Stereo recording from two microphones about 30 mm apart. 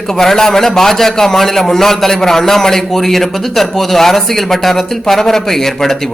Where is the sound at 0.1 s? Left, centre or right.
Centre.